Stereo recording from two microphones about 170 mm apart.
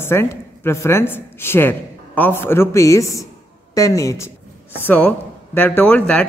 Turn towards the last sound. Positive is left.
turn(degrees=10)  # may be behind; listen again after turning